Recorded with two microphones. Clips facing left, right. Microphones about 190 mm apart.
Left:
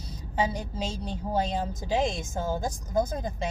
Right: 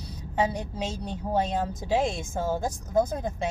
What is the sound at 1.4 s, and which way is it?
Speech, centre (ahead or behind).